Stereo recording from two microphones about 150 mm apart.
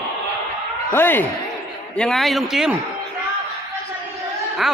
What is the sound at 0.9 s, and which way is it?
Speech, 15° left (ahead or behind).